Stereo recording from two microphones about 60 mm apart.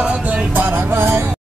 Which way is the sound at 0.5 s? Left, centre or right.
Right.